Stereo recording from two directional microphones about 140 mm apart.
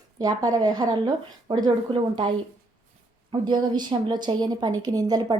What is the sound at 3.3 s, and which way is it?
A woman's voice, 35° right (ahead or behind).